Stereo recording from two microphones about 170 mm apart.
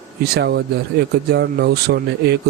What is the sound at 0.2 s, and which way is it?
Speech, 75° right (ahead or behind).